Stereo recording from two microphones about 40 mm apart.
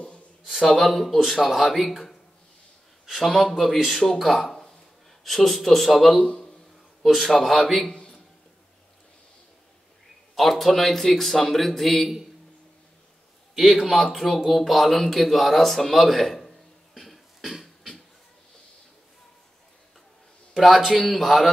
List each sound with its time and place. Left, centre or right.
0.5 s a man's voice: centre
3.2 s a man's voice: centre
7.9 s a sound: left
10.3 s a man's voice: centre
13.9 s a man's voice: centre
14.7 s a sound: centre
20.5 s a man's voice: centre